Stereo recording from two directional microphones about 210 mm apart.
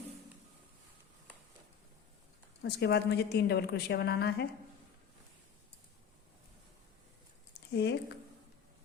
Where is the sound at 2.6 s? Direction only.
50° left (ahead or behind).